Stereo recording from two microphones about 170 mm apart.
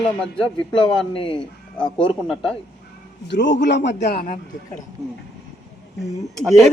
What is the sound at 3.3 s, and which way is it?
Speech, 90° left.